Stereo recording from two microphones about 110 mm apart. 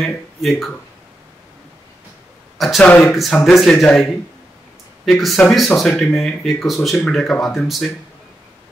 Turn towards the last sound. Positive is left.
turn(degrees=0)  # may be behind; listen again after turning